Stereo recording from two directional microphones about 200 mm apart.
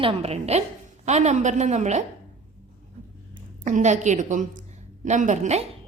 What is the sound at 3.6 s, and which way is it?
A woman's voice, 35° right (ahead or behind).